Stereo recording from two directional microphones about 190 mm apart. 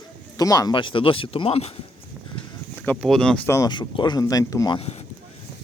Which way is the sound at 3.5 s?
20° left (ahead or behind).